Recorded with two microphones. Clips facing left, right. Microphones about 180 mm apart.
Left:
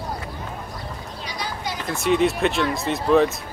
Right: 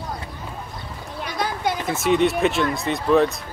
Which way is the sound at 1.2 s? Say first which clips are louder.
Right 7 dB; 55° right (ahead or behind).